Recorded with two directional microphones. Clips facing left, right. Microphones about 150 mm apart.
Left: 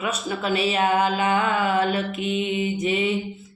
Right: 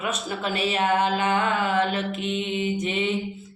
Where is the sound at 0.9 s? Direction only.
5° left (ahead or behind).